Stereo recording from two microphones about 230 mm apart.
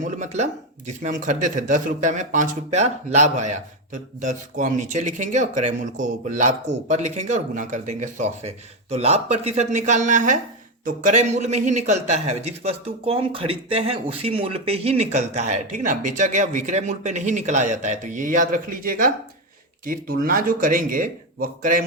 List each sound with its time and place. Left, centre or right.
0.0 s speech: right